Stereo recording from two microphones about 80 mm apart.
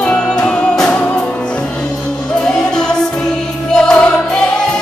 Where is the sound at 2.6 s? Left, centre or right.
Centre.